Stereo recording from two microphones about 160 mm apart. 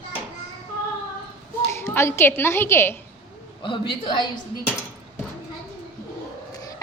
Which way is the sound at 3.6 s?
30° left (ahead or behind).